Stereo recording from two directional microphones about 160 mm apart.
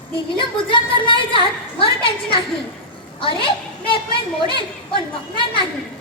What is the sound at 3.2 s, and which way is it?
A woman's voice, 30° left (ahead or behind).